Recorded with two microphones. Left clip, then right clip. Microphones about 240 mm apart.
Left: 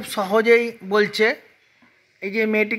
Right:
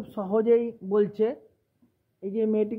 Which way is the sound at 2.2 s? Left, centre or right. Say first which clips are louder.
Left 5 dB; left.